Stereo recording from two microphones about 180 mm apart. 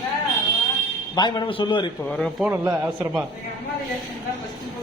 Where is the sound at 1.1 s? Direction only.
25° left (ahead or behind).